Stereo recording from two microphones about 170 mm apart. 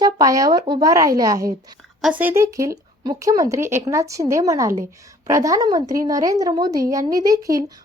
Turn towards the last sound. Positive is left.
turn(degrees=-20)  # may be behind; listen again after turning